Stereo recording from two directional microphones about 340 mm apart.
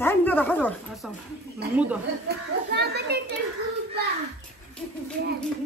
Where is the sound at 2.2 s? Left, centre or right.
Right.